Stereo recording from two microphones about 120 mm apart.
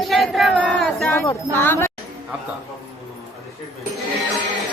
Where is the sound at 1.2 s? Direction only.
15° left (ahead or behind).